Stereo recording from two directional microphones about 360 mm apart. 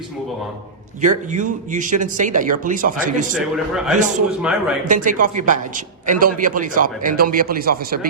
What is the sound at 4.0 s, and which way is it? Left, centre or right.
Speech, centre.